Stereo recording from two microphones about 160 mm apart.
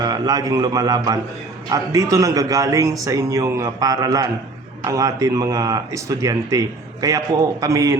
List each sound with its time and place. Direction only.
0.0 s speech: 25° right (ahead or behind)